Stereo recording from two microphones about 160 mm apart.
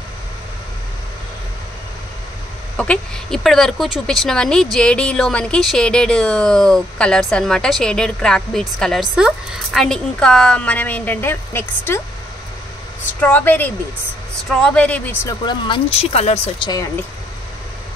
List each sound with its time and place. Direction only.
2.8 s a woman's voice: 5° left (ahead or behind)
13.2 s a woman's voice: 10° left (ahead or behind)
15.2 s speech: 30° left (ahead or behind)